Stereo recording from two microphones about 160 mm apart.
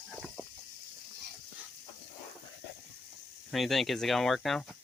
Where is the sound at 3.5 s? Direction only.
Centre (ahead or behind).